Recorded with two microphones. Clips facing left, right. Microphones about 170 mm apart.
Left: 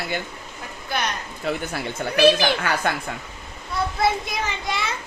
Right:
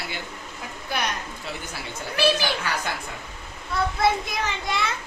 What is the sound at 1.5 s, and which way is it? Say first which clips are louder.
Speech: left 11 dB; 55° left (ahead or behind).